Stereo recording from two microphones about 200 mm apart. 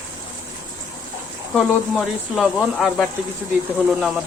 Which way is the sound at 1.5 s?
Centre (ahead or behind).